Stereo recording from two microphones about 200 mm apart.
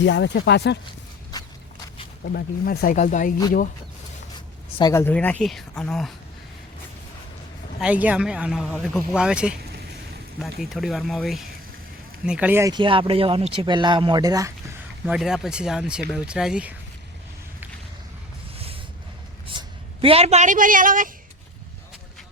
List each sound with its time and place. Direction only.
0.0 s speech: 65° left (ahead or behind)
2.2 s speech: 50° left (ahead or behind)
4.8 s speech: 15° left (ahead or behind)
7.8 s speech: 5° right (ahead or behind)
10.6 s speech: centre (ahead or behind); by 14.5 s 20° right (ahead or behind)
15.0 s speech: 5° right (ahead or behind)
18.5 s a sound: 30° right (ahead or behind)
19.5 s a man's voice: 25° right (ahead or behind)